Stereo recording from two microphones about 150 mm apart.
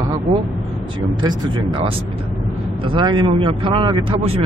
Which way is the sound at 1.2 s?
30° right (ahead or behind).